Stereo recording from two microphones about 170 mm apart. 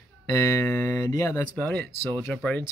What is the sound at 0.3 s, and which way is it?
Speech, 15° left (ahead or behind).